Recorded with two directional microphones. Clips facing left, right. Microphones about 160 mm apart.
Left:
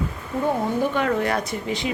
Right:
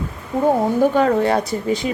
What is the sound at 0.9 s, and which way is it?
Speech, 35° right (ahead or behind).